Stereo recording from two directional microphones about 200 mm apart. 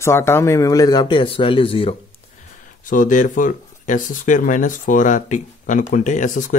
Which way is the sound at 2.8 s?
40° left (ahead or behind).